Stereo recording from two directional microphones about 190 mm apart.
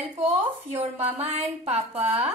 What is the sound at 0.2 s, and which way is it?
A woman's voice, 35° right (ahead or behind).